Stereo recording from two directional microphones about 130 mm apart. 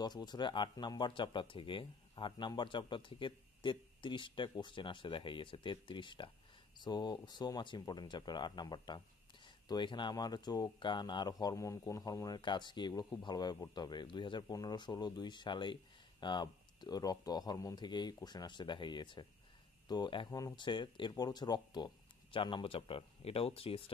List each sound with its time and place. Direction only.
0.0 s speech: 35° left (ahead or behind)